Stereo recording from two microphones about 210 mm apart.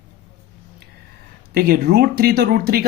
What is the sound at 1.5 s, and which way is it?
Speech, 45° right (ahead or behind).